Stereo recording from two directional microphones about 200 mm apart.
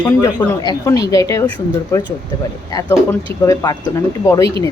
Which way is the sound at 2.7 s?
15° left (ahead or behind).